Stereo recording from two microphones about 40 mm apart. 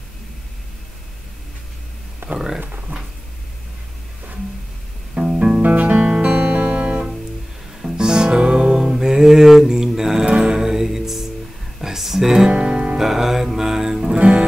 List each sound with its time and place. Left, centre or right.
2.3 s speech: centre
2.9 s a sound: right
5.1 s music: centre
5.6 s music: right
6.2 s music: right
7.8 s music: centre
9.7 s mantra: centre
10.2 s music: right
10.6 s music: centre
12.4 s music: right
12.9 s music: centre